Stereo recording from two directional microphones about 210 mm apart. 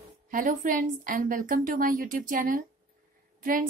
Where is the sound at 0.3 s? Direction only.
40° right (ahead or behind).